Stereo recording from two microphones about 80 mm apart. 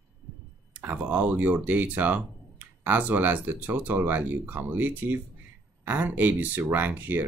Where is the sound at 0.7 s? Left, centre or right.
Centre.